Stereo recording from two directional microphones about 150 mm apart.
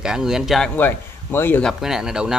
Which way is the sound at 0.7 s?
15° left (ahead or behind).